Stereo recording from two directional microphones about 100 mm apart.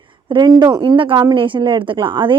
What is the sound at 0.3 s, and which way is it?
A woman's voice, 45° right (ahead or behind).